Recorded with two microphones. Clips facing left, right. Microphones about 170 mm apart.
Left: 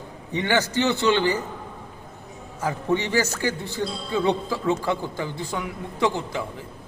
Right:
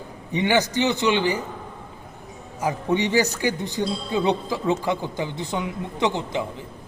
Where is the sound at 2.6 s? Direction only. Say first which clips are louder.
Right 1 dB; 15° right (ahead or behind).